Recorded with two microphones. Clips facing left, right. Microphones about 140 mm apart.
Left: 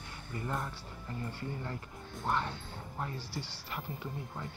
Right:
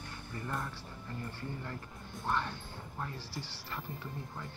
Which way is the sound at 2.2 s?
15° left (ahead or behind).